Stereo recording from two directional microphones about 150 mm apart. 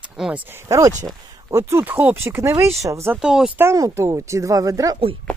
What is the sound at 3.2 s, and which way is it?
Speech, 5° right (ahead or behind).